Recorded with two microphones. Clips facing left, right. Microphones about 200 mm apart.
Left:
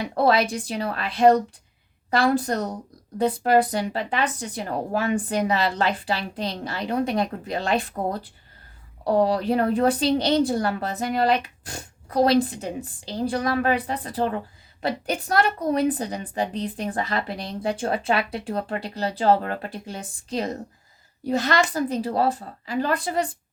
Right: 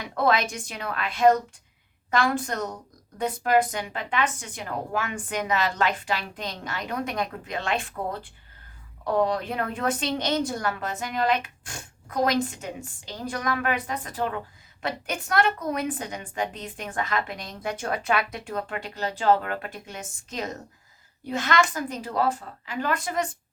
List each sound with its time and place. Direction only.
0.0 s a woman's voice: 35° left (ahead or behind)